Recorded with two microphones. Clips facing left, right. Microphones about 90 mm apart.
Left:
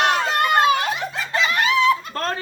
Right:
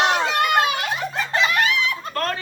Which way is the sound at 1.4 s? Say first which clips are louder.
Left 2 dB; 30° left (ahead or behind).